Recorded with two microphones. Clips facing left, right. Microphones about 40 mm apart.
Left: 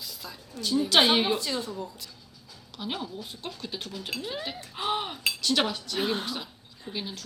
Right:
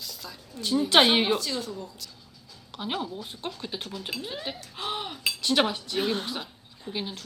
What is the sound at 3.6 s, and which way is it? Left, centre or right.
Cutlery, right.